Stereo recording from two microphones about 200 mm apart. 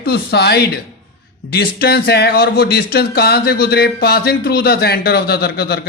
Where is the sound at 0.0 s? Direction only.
55° left (ahead or behind).